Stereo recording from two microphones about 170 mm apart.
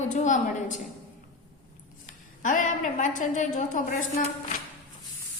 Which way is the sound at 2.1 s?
50° left (ahead or behind).